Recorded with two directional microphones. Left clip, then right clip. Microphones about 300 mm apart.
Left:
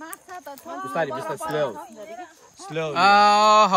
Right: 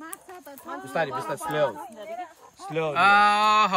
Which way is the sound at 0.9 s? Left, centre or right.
Right.